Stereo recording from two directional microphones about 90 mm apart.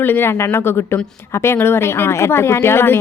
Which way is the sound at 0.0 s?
25° left (ahead or behind).